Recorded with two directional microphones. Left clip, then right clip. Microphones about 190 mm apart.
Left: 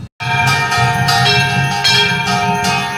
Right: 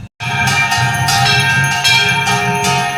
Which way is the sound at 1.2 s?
55° right (ahead or behind).